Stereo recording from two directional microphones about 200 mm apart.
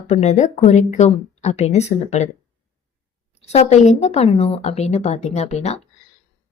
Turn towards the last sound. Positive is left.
turn(degrees=35)  # may be behind; listen again after turning